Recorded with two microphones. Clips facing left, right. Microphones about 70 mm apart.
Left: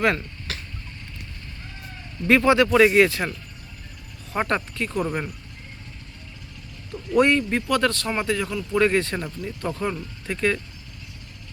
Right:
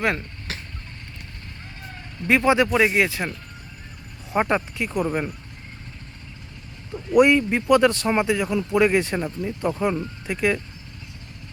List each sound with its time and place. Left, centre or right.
0.0 s vehicle: right
2.2 s a man's voice: centre
4.3 s a man's voice: centre
6.9 s a man's voice: centre